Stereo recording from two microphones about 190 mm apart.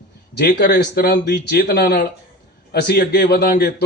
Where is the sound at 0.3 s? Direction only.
60° left (ahead or behind).